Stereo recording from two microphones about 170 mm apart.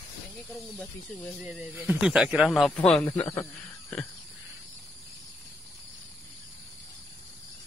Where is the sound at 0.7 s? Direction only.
Centre (ahead or behind).